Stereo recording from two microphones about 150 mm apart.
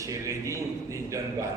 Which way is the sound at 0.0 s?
20° right (ahead or behind).